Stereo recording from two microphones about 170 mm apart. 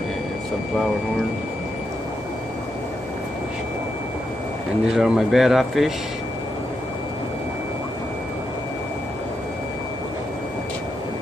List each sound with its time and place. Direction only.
4.9 s speech: centre (ahead or behind)